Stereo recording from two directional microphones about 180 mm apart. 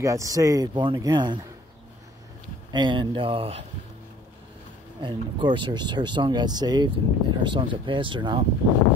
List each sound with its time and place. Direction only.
0.0 s speech: 15° right (ahead or behind)
2.7 s speech: 25° right (ahead or behind)
5.0 s speech: 25° right (ahead or behind)